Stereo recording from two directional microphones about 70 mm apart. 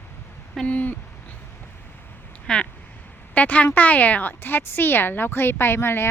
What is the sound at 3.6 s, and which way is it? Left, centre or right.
A woman's voice, left.